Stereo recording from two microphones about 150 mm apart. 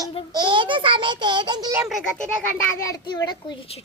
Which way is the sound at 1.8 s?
Centre (ahead or behind).